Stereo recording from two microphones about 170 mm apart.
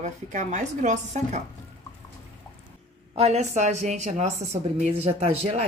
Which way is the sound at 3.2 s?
40° right (ahead or behind).